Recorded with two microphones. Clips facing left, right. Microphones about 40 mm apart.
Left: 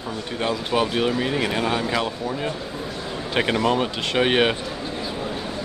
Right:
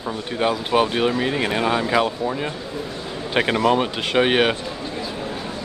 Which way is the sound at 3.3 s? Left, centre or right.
Centre.